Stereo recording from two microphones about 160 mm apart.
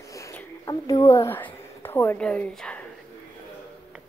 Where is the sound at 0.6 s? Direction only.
20° left (ahead or behind); by 2.9 s 5° left (ahead or behind).